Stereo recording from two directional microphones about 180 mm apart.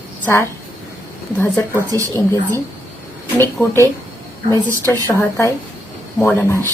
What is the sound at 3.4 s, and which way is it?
Speech, 15° left (ahead or behind).